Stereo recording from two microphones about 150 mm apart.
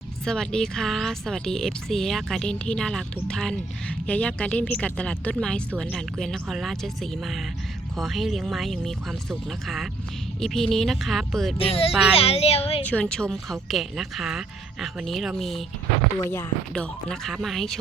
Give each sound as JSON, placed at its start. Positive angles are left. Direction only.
{"t": 0.3, "sound": "speech", "side_deg": 5}
{"t": 11.5, "sound": "speech", "side_deg": 40}
{"t": 12.8, "sound": "speech", "side_deg": 10}
{"t": 16.2, "sound": "speech", "side_deg": 20}
{"t": 16.7, "sound": "speech", "side_deg": 5}